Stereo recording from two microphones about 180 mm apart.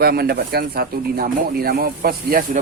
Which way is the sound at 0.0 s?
60° right (ahead or behind).